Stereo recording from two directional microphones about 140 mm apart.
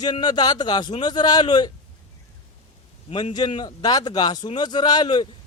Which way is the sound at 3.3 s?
30° left (ahead or behind).